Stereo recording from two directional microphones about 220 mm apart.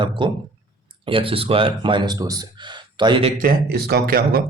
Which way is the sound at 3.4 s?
45° right (ahead or behind).